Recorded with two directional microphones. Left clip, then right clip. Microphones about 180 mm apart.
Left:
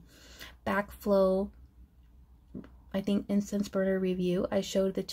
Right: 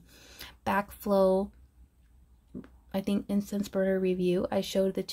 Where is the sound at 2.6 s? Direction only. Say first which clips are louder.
Right 1 dB; 15° right (ahead or behind).